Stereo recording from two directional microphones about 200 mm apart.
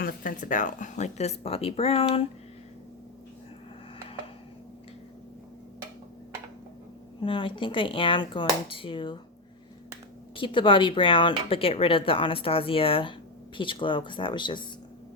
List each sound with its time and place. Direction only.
0.0 s speech: 45° left (ahead or behind); by 2.2 s 30° left (ahead or behind)
7.2 s speech: 25° left (ahead or behind)
10.3 s speech: 25° left (ahead or behind)